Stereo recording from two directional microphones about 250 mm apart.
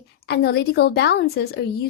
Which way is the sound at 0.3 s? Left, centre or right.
Left.